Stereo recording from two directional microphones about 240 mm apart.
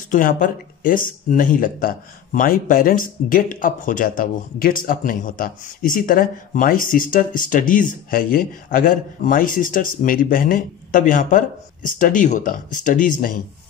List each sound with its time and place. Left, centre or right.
0.1 s speech: left